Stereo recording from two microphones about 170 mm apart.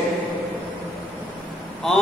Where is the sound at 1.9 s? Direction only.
5° left (ahead or behind).